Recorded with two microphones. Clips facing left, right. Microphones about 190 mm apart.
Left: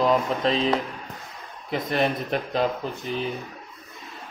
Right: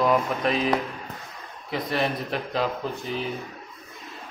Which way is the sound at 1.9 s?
25° left (ahead or behind).